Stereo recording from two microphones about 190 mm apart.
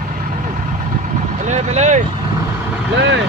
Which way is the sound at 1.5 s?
35° right (ahead or behind).